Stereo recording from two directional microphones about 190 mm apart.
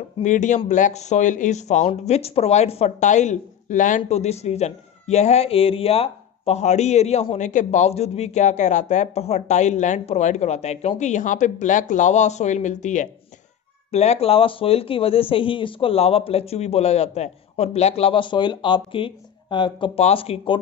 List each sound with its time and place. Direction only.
0.2 s speech: 40° left (ahead or behind)